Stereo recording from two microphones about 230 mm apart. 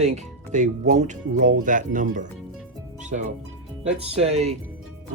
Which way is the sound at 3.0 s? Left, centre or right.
Right.